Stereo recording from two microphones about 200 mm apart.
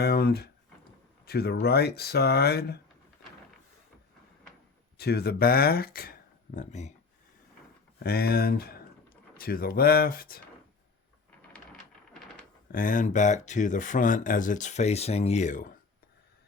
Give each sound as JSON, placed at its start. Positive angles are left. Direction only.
{"t": 0.0, "sound": "speech", "side_deg": 50}
{"t": 4.9, "sound": "speech", "side_deg": 50}
{"t": 7.9, "sound": "speech", "side_deg": 50}
{"t": 12.7, "sound": "speech", "side_deg": 40}